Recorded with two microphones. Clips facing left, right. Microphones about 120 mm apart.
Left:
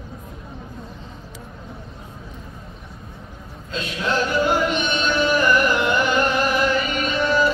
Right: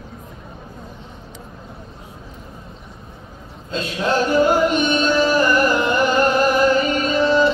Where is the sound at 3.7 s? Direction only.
35° right (ahead or behind).